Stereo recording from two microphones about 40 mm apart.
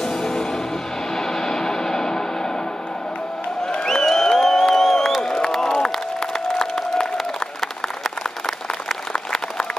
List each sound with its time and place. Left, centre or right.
0.0 s music: centre
3.6 s crowd: centre
6.6 s applause: centre